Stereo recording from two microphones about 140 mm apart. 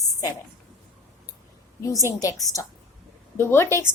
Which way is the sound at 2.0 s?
25° left (ahead or behind).